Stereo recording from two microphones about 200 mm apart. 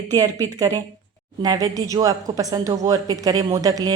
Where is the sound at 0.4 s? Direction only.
20° right (ahead or behind).